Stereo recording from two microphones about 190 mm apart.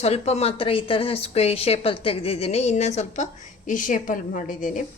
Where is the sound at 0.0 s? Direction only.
35° left (ahead or behind).